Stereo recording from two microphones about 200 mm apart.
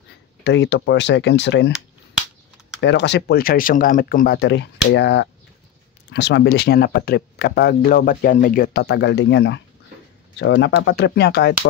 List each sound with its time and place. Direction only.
0.4 s speech: 60° left (ahead or behind)
2.8 s speech: 60° left (ahead or behind)